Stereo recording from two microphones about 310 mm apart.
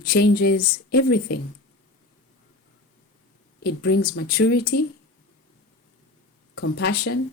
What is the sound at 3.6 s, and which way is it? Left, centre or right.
Speech, left.